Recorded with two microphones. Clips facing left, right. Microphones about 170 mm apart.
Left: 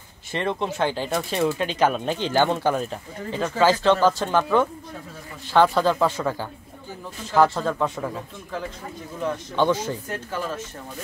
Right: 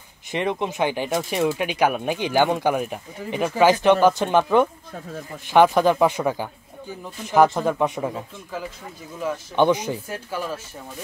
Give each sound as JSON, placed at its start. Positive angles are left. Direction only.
{"t": 0.3, "sound": "speech", "side_deg": -15}
{"t": 9.2, "sound": "speech", "side_deg": -5}
{"t": 9.6, "sound": "speech", "side_deg": -15}